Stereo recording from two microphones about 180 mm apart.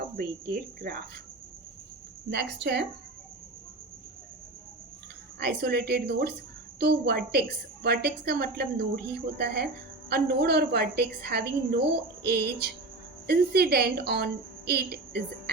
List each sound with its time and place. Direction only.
0.2 s a woman's voice: 60° right (ahead or behind)
2.3 s a woman's voice: 70° right (ahead or behind)
5.4 s a woman's voice: 65° right (ahead or behind)